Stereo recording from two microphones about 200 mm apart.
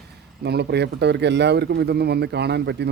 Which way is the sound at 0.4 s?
55° right (ahead or behind).